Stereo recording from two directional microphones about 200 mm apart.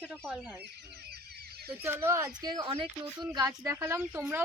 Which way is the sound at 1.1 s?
50° right (ahead or behind).